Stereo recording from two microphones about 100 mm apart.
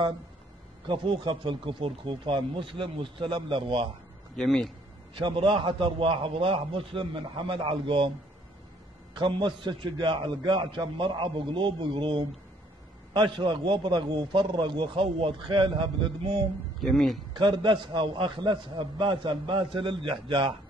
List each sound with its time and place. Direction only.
0.8 s a man's voice: 60° right (ahead or behind)
4.4 s speech: 5° left (ahead or behind)
5.1 s a man's voice: 55° right (ahead or behind)
9.1 s a man's voice: 50° right (ahead or behind)
16.8 s speech: centre (ahead or behind)
17.3 s a man's voice: 50° right (ahead or behind)